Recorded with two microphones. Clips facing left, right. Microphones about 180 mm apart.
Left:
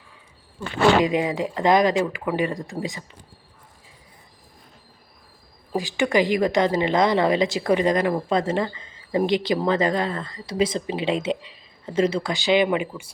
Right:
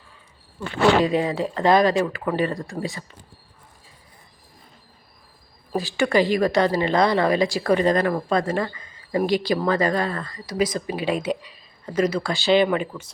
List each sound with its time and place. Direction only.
1.0 s speech: 15° left (ahead or behind)
5.7 s a woman's voice: 15° left (ahead or behind)